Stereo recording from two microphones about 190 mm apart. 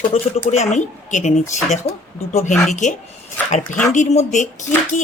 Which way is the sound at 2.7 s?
40° left (ahead or behind).